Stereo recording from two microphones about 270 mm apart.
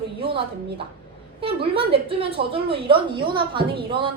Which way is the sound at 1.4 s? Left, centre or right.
Centre.